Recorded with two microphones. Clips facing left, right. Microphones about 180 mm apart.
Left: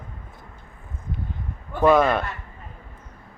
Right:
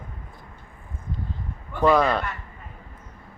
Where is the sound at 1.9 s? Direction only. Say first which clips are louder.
Left 2 dB; centre (ahead or behind).